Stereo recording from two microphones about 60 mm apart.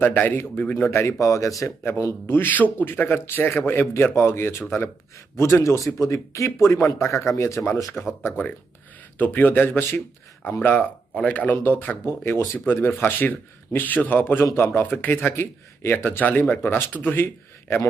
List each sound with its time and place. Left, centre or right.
0.0 s a man's voice: left
0.9 s speech: left
1.8 s a man's voice: left
4.1 s speech: left
5.6 s speech: left
9.1 s speech: left
9.6 s a man's voice: left
10.6 s speech: left
11.5 s a man's voice: left
16.0 s speech: left